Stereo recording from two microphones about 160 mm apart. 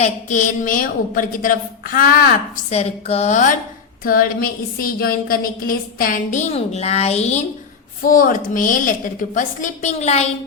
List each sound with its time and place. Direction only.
0.0 s a woman's voice: 50° left (ahead or behind)
2.6 s a woman's voice: 40° left (ahead or behind)
4.0 s a woman's voice: 65° left (ahead or behind); by 7.4 s 45° left (ahead or behind)
8.0 s a woman's voice: 60° left (ahead or behind)